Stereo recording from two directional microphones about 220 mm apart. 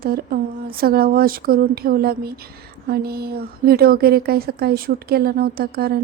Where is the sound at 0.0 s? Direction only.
45° right (ahead or behind).